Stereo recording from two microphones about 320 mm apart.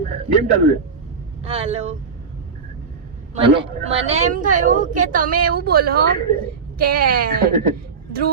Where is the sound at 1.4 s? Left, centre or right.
Centre.